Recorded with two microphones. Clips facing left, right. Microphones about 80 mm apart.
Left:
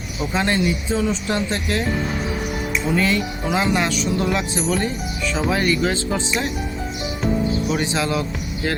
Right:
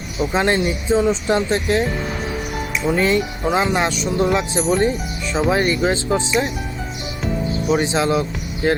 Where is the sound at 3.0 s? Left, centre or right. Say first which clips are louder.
Right 3 dB; right.